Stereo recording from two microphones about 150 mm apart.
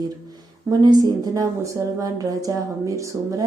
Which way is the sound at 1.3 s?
20° right (ahead or behind).